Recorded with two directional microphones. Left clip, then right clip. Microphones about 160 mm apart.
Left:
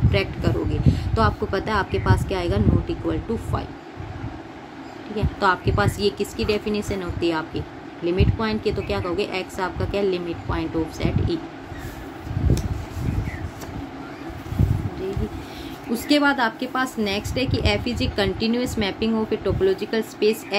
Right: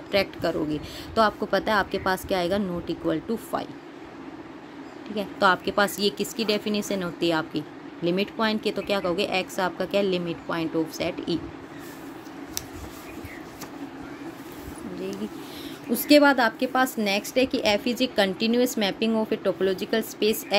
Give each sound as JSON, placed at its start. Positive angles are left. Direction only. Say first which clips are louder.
{"t": 0.1, "sound": "a woman's voice", "louder": "right 2 dB", "side_deg": -40}
{"t": 5.1, "sound": "speech", "louder": "left 1 dB", "side_deg": -40}
{"t": 15.9, "sound": "a woman's voice", "louder": "right 2 dB", "side_deg": -40}